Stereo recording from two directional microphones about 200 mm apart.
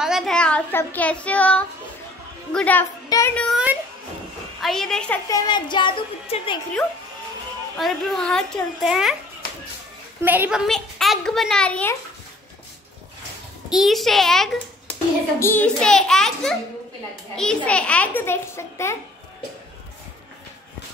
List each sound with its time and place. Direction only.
0.0 s a child's voice: centre (ahead or behind)
4.6 s a woman's voice: centre (ahead or behind)
5.3 s a woman's voice: 20° left (ahead or behind)
7.7 s a woman's voice: centre (ahead or behind)
10.2 s a woman's voice: 10° right (ahead or behind); by 12.0 s 10° left (ahead or behind)
13.7 s a woman's voice: centre (ahead or behind)